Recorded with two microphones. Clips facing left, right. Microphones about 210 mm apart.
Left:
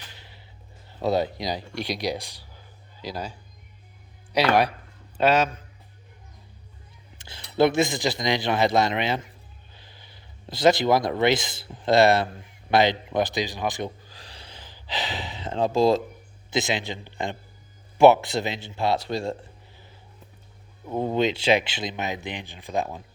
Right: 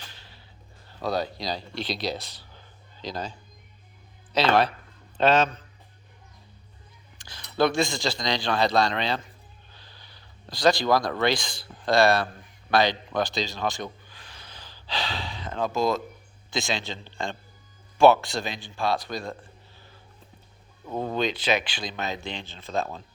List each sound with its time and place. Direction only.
0.1 s music: 20° left (ahead or behind)
0.9 s speech: 20° left (ahead or behind)
7.2 s speech: 25° left (ahead or behind)
14.0 s gasp: 35° left (ahead or behind)
16.5 s speech: 20° left (ahead or behind)
20.9 s speech: 20° left (ahead or behind)